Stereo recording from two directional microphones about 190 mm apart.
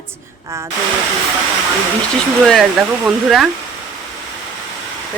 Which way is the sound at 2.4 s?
Centre (ahead or behind).